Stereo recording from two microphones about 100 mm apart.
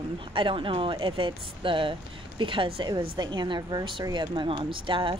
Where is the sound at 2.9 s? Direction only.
45° right (ahead or behind).